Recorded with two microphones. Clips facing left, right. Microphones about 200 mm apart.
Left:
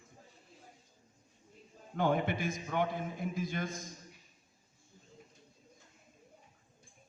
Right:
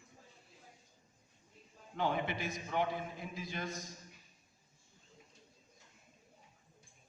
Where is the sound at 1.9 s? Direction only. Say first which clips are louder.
Left 4 dB; 50° left (ahead or behind).